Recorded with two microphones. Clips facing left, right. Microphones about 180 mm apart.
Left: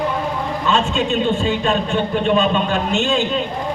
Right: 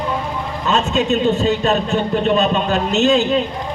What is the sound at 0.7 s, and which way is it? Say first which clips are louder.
A man's voice: right 2 dB; 40° right (ahead or behind).